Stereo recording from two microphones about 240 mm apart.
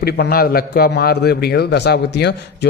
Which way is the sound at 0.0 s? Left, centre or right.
Left.